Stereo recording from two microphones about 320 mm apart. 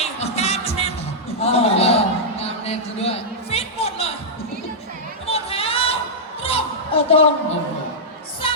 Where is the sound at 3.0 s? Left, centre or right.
Centre.